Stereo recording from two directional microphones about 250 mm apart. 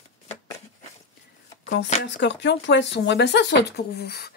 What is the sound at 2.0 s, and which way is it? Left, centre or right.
Speech, left.